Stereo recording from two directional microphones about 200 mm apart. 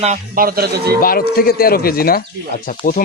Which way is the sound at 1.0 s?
45° left (ahead or behind).